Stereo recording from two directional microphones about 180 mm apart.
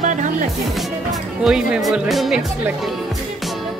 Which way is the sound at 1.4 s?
5° right (ahead or behind).